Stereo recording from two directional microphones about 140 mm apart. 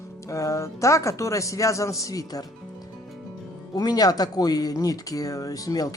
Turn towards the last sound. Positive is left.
turn(degrees=25)  # may be behind; listen again after turning